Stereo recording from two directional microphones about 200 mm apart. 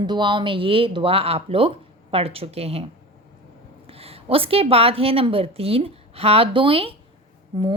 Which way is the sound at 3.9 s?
30° right (ahead or behind).